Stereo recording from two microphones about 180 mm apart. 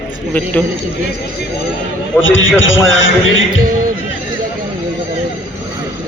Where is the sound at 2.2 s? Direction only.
90° left.